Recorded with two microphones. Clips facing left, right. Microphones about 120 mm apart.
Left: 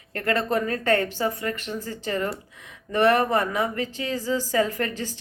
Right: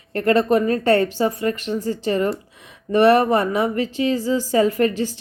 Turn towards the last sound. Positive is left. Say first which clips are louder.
# right 10 dB
turn(degrees=-15)  # may be behind; listen again after turning